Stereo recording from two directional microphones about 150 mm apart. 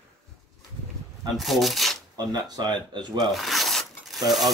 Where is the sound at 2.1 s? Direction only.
25° right (ahead or behind).